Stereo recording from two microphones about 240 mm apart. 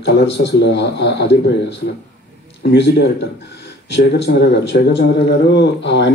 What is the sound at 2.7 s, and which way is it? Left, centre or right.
Speech, left.